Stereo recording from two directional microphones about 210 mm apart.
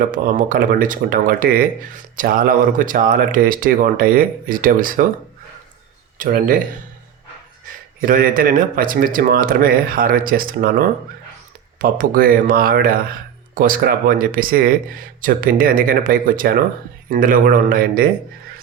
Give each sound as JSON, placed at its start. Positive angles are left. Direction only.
{"t": 0.0, "sound": "speech", "side_deg": -40}
{"t": 6.1, "sound": "speech", "side_deg": -40}
{"t": 8.0, "sound": "speech", "side_deg": -40}